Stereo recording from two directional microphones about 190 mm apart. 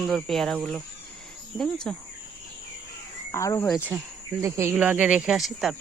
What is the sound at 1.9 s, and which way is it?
Speech, 5° left (ahead or behind).